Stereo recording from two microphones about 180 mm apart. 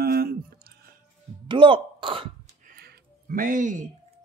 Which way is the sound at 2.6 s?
60° right (ahead or behind).